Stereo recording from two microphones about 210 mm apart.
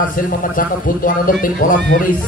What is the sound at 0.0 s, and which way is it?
A man's voice, 40° left (ahead or behind).